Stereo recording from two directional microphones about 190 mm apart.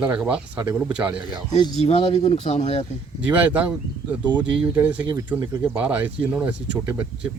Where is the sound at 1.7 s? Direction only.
35° left (ahead or behind).